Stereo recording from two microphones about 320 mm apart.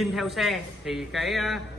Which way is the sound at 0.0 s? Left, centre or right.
Centre.